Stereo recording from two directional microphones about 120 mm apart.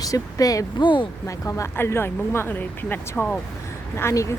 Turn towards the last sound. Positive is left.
turn(degrees=25)  # may be behind; listen again after turning